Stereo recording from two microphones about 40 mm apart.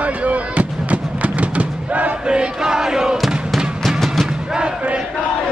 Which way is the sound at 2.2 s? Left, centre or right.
Right.